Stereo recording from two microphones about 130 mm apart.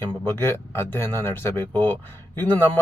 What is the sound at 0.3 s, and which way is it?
A man's voice, 20° left (ahead or behind).